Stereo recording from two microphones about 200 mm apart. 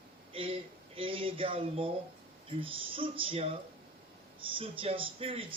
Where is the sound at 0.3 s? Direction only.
25° right (ahead or behind).